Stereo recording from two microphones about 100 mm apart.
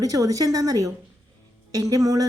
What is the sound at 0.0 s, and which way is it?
Speech, 35° right (ahead or behind).